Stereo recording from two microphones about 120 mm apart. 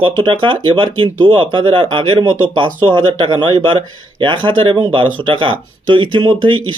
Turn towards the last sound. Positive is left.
turn(degrees=-40)  # may be behind; listen again after turning